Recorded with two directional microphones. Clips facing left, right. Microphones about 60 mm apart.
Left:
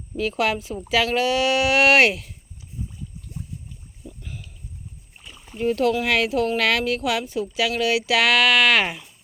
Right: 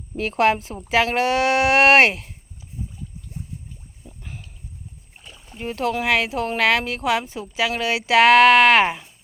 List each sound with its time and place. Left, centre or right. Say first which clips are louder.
0.2 s speech: right 4 dB; right
4.2 s a sound: right 2 dB; right
5.5 s speech: left 4 dB; centre